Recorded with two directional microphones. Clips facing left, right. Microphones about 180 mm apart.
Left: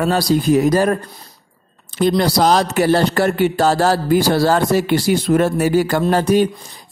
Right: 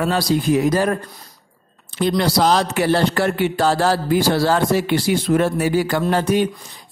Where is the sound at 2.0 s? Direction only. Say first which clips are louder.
Left 3 dB; 40° left (ahead or behind).